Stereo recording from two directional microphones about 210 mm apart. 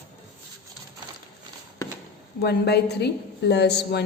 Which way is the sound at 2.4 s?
50° left (ahead or behind).